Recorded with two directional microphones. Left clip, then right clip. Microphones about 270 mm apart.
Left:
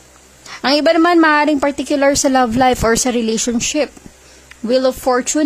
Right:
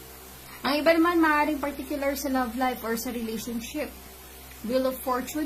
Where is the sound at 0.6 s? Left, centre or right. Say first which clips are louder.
Left 10 dB; left.